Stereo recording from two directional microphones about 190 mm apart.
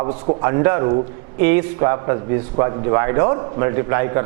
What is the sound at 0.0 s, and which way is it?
Speech, 30° right (ahead or behind).